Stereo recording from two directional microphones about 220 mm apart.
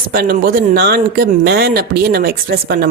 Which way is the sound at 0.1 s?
40° right (ahead or behind).